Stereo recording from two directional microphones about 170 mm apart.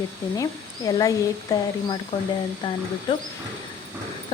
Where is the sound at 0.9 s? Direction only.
20° left (ahead or behind).